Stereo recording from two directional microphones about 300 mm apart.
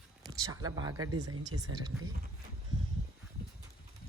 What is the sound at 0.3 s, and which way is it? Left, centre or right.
Speech, centre.